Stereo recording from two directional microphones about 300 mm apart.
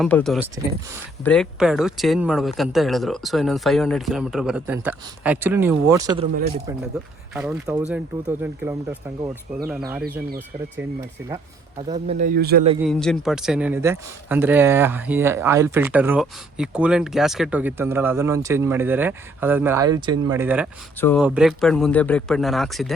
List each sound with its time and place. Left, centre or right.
0.0 s speech: centre
0.4 s speech: centre
1.2 s speech: centre
6.9 s speech: centre
11.2 s speech: centre
11.9 s speech: right
12.8 s speech: centre
21.0 s speech: centre